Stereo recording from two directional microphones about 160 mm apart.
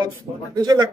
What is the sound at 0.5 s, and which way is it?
Speech, 25° right (ahead or behind).